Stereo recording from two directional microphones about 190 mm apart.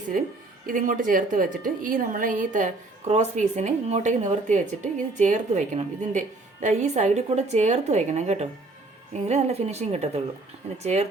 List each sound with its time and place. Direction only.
0.7 s a woman's voice: 45° right (ahead or behind)